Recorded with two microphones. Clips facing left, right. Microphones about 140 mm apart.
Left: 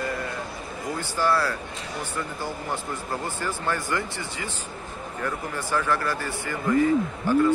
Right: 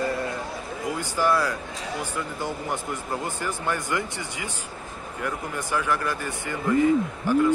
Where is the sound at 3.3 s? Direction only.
15° right (ahead or behind).